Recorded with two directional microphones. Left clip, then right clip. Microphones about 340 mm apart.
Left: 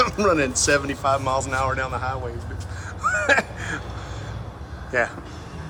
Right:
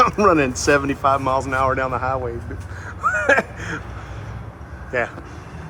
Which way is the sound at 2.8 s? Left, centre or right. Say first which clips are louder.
Right 3 dB; centre.